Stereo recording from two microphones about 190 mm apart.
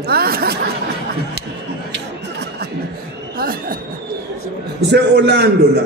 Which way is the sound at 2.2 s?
60° right (ahead or behind).